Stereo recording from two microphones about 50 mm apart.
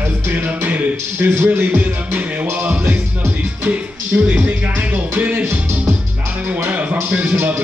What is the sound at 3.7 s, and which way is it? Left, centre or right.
Music, right.